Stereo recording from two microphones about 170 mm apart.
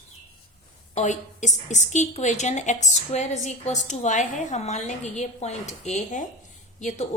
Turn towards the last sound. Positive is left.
turn(degrees=45)  # may be behind; listen again after turning